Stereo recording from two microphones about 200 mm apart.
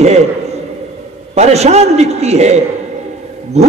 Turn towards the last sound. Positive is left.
turn(degrees=-35)  # may be behind; listen again after turning